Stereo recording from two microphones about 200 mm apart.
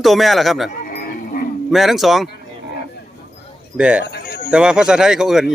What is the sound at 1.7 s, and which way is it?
Speech, centre (ahead or behind).